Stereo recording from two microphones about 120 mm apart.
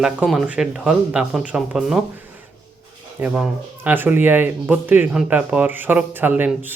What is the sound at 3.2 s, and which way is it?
Speech, 15° right (ahead or behind).